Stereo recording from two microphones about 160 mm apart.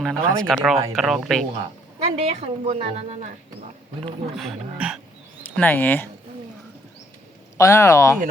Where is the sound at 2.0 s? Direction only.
40° right (ahead or behind).